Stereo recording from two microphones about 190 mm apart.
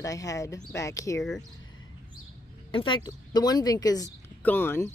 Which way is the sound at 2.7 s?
25° left (ahead or behind).